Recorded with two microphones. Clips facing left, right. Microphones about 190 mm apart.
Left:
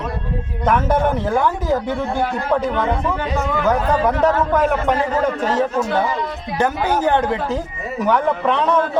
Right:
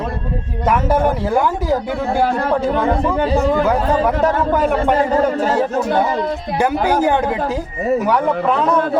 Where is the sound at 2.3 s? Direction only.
35° right (ahead or behind).